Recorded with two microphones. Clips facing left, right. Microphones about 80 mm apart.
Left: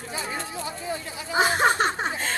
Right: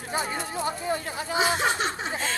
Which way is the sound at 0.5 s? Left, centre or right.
Right.